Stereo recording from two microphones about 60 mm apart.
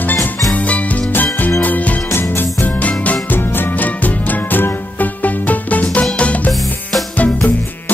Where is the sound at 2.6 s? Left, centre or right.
Left.